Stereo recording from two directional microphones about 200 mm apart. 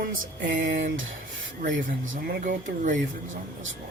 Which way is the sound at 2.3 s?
45° right (ahead or behind).